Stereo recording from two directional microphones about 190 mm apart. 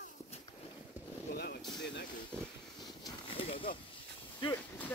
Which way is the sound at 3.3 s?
30° left (ahead or behind).